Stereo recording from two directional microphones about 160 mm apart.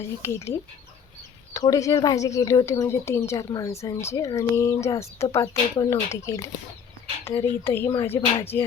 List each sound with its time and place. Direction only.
0.0 s speech: 15° left (ahead or behind)
1.5 s a woman's voice: 20° left (ahead or behind)
8.4 s speech: 15° left (ahead or behind)